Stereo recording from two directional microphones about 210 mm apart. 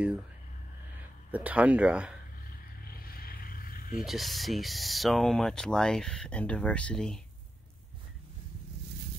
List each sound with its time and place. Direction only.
1.3 s speech: 5° right (ahead or behind)
3.2 s a sound: 45° left (ahead or behind)
4.0 s speech: centre (ahead or behind)